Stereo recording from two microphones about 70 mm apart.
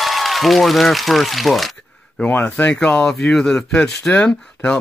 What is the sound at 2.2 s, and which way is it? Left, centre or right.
Speech, left.